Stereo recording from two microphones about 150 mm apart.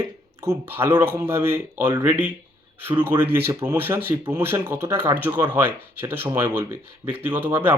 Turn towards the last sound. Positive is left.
turn(degrees=-15)  # may be behind; listen again after turning